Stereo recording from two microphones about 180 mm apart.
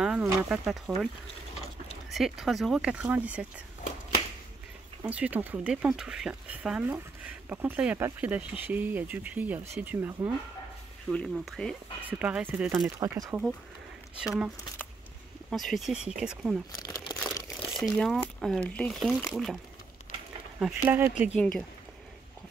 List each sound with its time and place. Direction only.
0.0 s a sound: 5° right (ahead or behind)
0.4 s speech: 5° right (ahead or behind)
2.0 s speech: centre (ahead or behind)
5.0 s speech: 10° right (ahead or behind)
11.1 s speech: centre (ahead or behind)
12.0 s speech: 10° right (ahead or behind)
13.0 s speech: 15° right (ahead or behind)
15.5 s speech: centre (ahead or behind)
16.7 s crumpling: 25° left (ahead or behind)
17.8 s speech: centre (ahead or behind)